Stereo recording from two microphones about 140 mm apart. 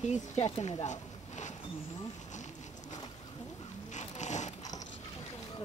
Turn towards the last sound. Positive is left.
turn(degrees=55)  # may be behind; listen again after turning